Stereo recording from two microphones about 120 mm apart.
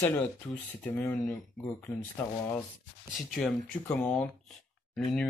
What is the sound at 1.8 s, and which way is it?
Speech, 10° left (ahead or behind).